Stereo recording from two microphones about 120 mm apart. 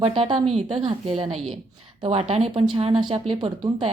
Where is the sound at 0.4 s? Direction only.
60° right (ahead or behind).